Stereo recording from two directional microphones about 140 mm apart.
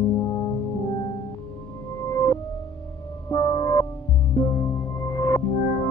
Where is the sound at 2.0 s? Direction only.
20° left (ahead or behind).